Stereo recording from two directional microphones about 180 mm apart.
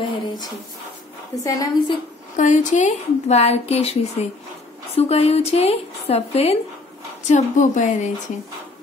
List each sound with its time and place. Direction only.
1.3 s a woman's voice: 20° left (ahead or behind)
2.3 s speech: 45° left (ahead or behind)